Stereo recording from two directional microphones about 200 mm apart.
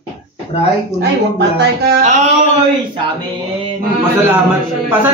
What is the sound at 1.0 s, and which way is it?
Speech, 55° right (ahead or behind).